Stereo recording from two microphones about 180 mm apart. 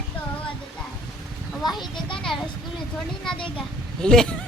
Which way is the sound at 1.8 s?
25° left (ahead or behind).